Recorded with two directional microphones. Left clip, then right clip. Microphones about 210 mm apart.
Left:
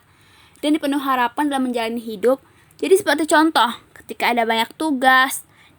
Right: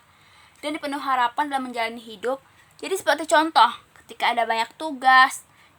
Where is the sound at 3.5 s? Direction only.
30° left (ahead or behind).